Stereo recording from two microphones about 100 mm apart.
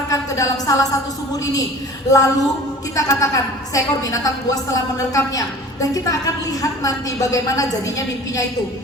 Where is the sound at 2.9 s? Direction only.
35° left (ahead or behind).